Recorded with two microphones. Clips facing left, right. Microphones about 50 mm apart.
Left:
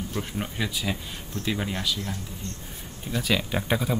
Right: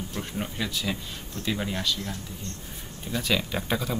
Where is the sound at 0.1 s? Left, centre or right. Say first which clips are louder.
Left 1 dB; centre.